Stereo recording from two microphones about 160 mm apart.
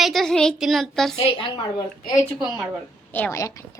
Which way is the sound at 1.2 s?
35° left (ahead or behind).